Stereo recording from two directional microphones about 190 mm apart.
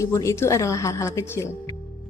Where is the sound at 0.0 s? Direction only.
15° left (ahead or behind).